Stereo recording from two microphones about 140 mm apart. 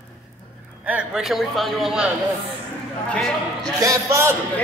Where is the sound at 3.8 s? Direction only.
20° right (ahead or behind).